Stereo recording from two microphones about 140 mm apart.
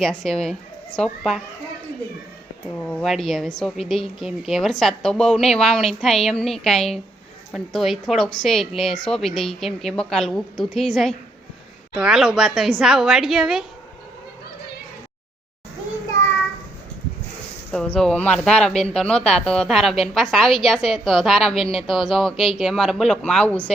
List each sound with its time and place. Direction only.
0.0 s speech: centre (ahead or behind)
2.7 s speech: 15° left (ahead or behind)
3.0 s speech: centre (ahead or behind)
17.7 s speech: 5° left (ahead or behind)